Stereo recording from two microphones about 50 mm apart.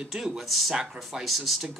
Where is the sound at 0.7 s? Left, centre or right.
Centre.